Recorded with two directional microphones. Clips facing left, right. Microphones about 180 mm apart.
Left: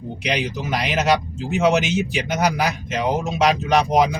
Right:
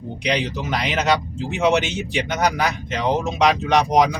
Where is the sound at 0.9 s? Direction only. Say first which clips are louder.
Left 1 dB; centre (ahead or behind).